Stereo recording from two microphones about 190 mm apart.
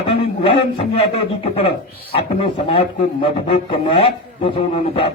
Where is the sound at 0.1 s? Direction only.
30° left (ahead or behind).